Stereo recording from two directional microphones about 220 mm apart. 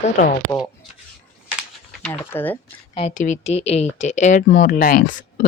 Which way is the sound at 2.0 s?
10° left (ahead or behind).